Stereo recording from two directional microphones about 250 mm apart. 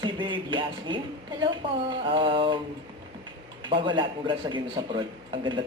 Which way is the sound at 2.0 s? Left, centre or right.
Right.